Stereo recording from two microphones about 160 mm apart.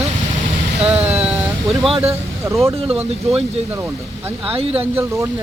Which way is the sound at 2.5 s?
20° right (ahead or behind).